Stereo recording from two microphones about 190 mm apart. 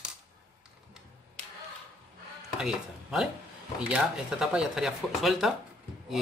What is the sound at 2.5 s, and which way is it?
Speech, 5° right (ahead or behind).